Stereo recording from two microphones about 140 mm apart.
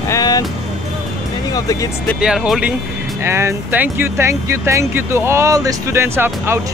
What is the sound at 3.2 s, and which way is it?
Speech, 20° right (ahead or behind).